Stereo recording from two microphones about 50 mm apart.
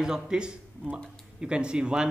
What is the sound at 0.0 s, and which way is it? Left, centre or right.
A woman's voice, centre.